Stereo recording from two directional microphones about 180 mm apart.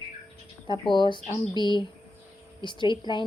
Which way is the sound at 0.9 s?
25° left (ahead or behind).